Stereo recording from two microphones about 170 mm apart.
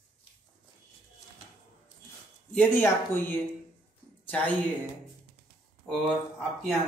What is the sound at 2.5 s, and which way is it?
Speech, 10° left (ahead or behind).